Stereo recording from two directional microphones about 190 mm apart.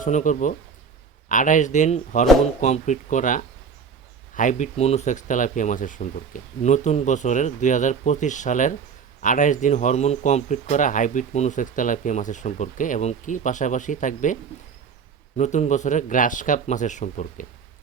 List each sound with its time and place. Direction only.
0.0 s speech: 40° left (ahead or behind)
15.4 s speech: 40° left (ahead or behind)